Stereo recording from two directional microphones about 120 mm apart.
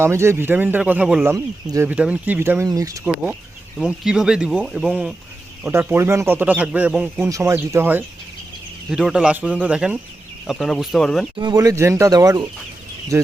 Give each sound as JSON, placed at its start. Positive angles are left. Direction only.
{"t": 0.0, "sound": "a man's voice", "side_deg": -20}
{"t": 2.6, "sound": "speech", "side_deg": -30}
{"t": 3.8, "sound": "speech", "side_deg": -5}
{"t": 5.6, "sound": "a man's voice", "side_deg": -15}
{"t": 7.3, "sound": "speech", "side_deg": -25}
{"t": 8.9, "sound": "a man's voice", "side_deg": -5}
{"t": 11.3, "sound": "speech", "side_deg": -35}